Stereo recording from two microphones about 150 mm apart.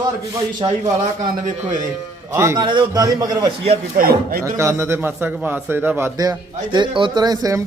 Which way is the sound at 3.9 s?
70° right (ahead or behind).